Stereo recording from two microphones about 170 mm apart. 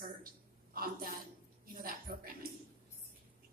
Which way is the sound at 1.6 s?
60° right (ahead or behind).